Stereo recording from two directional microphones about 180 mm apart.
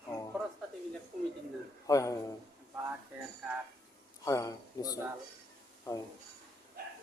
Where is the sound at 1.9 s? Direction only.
20° left (ahead or behind).